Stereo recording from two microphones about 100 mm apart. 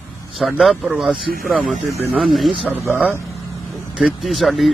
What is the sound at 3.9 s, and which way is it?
Speech, 5° right (ahead or behind).